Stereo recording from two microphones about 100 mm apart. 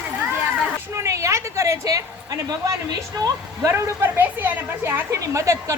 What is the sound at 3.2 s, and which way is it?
Speech, 30° right (ahead or behind).